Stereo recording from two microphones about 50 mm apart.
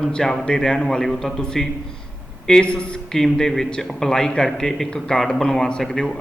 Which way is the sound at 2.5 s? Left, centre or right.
Centre.